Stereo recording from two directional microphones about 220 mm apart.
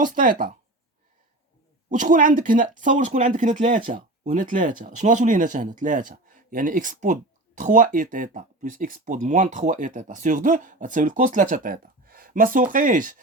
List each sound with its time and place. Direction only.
0.0 s speech: 40° right (ahead or behind)
1.9 s speech: 35° right (ahead or behind)